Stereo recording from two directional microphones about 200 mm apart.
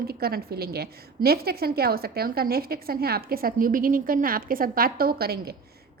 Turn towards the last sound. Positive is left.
turn(degrees=-50)  # may be behind; listen again after turning